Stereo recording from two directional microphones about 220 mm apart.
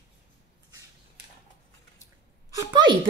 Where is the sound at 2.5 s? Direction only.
20° right (ahead or behind).